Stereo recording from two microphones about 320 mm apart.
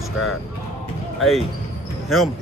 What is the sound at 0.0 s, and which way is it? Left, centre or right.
Speech, centre.